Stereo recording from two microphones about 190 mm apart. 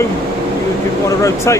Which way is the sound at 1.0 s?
15° left (ahead or behind).